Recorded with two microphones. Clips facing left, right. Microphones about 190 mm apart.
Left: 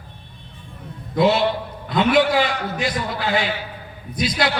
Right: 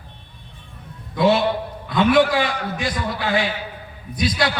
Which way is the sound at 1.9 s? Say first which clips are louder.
Right 1 dB; 20° left (ahead or behind).